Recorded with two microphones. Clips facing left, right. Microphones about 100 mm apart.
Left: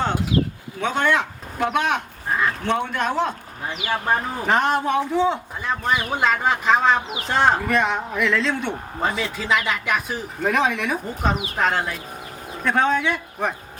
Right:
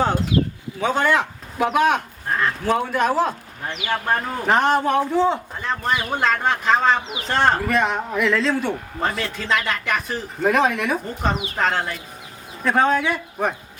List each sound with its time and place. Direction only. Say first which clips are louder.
0.8 s a man's voice: right 2 dB; 5° right (ahead or behind)